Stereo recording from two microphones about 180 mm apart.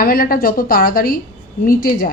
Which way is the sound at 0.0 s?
55° left (ahead or behind).